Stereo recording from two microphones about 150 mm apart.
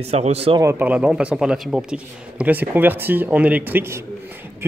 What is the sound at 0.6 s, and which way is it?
Speech, 15° right (ahead or behind).